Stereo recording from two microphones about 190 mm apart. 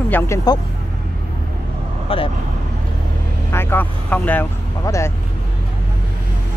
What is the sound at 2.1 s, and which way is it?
Speech, 30° left (ahead or behind).